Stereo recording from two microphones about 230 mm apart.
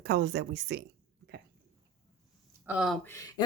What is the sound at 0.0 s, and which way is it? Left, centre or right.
Speech, right.